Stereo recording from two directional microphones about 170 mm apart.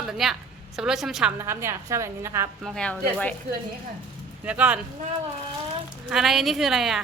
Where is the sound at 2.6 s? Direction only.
5° left (ahead or behind).